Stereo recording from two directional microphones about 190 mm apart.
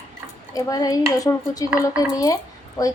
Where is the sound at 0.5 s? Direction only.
20° left (ahead or behind).